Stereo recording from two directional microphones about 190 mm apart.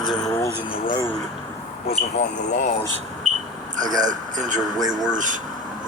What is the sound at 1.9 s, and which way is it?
Speech, 35° left (ahead or behind).